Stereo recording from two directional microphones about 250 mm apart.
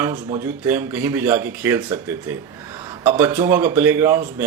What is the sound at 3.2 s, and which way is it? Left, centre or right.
Speech, centre.